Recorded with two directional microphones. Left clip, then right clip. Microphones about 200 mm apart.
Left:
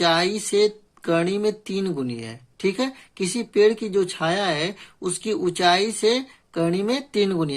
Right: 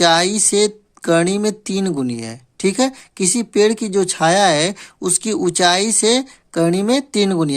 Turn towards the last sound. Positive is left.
turn(degrees=-35)  # may be behind; listen again after turning